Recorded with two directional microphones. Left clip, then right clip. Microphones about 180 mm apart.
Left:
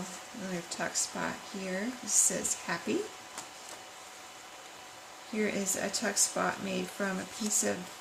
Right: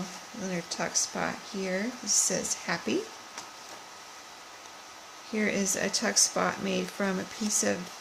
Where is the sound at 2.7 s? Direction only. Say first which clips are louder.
Right 4 dB; 45° right (ahead or behind).